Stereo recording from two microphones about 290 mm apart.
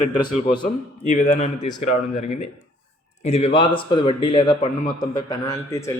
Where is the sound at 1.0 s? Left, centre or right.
Left.